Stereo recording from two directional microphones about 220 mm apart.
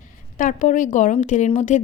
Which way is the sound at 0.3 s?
35° left (ahead or behind).